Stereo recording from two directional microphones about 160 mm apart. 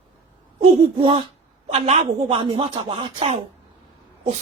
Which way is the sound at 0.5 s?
35° right (ahead or behind).